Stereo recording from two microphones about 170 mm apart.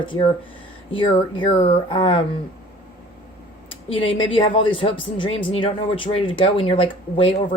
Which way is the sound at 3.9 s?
30° left (ahead or behind).